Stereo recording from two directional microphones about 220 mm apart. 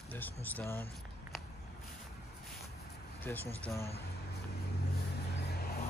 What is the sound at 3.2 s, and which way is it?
Speech, 10° left (ahead or behind).